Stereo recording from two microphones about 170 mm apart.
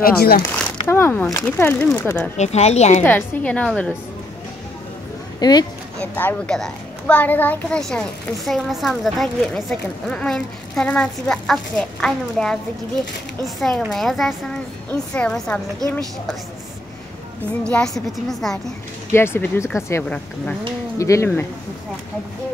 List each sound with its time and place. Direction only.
0.0 s speech: 60° left (ahead or behind)
0.8 s speech: 15° left (ahead or behind)
2.3 s speech: 40° left (ahead or behind)
3.0 s speech: 10° left (ahead or behind)
5.4 s speech: 25° left (ahead or behind)
5.9 s a child's voice: 10° left (ahead or behind)
13.6 s a child's voice: centre (ahead or behind)
17.6 s a child's voice: 5° left (ahead or behind)
19.1 s speech: 15° left (ahead or behind)